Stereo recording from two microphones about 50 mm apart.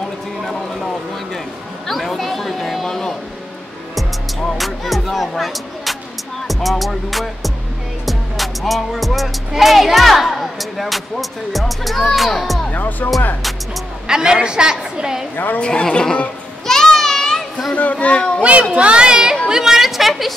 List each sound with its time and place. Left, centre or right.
1.9 s music: centre
4.6 s music: centre
12.7 s speech: left
14.0 s a woman's voice: centre
15.3 s speech: left
15.6 s a man's voice: centre
16.6 s children playing: centre
18.0 s a child's voice: left
18.4 s speech: right
19.4 s a sound: centre